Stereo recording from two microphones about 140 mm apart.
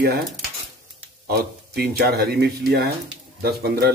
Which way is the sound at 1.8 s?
90° right.